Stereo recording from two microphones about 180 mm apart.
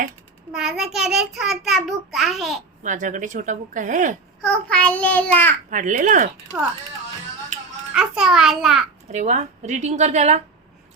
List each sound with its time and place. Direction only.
0.5 s a child's voice: centre (ahead or behind)
2.8 s a woman's voice: 45° right (ahead or behind)
4.4 s a child's voice: 5° left (ahead or behind)
5.7 s a woman's voice: 45° right (ahead or behind)
7.9 s a child's voice: 5° right (ahead or behind)
9.1 s a woman's voice: 40° right (ahead or behind)